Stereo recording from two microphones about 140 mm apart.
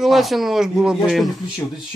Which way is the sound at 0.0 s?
Centre (ahead or behind).